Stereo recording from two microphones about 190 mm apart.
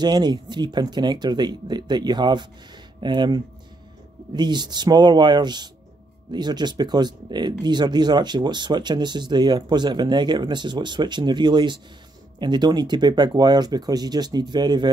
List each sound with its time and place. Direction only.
0.0 s speech: 20° right (ahead or behind)